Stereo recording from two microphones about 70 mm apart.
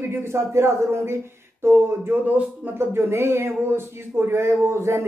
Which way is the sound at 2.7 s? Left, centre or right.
Right.